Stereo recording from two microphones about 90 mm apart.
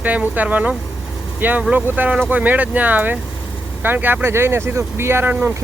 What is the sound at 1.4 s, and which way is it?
Speech, 20° right (ahead or behind).